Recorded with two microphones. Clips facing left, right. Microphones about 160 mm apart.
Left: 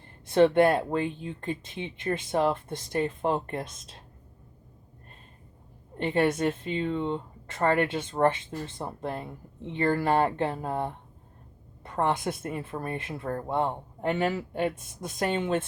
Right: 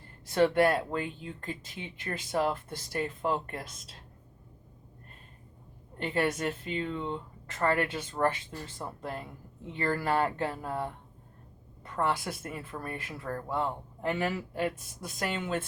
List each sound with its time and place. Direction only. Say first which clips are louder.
0.3 s speech: left 4 dB; 25° left (ahead or behind)
6.0 s speech: left 5 dB; 25° left (ahead or behind)